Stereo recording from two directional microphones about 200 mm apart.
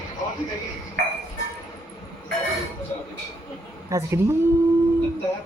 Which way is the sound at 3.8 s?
15° right (ahead or behind).